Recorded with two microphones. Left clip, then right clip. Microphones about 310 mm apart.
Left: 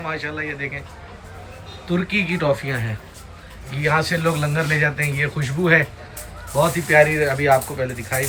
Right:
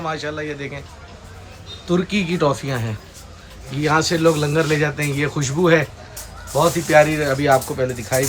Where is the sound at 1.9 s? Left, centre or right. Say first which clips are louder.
Right 1 dB; centre.